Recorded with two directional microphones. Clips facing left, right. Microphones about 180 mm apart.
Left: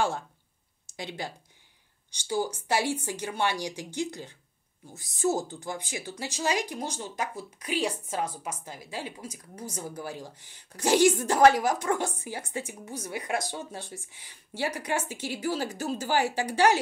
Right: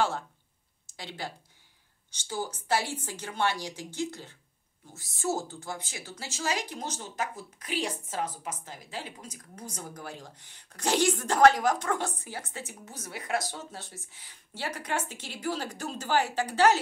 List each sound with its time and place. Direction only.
0.9 s speech: 15° left (ahead or behind)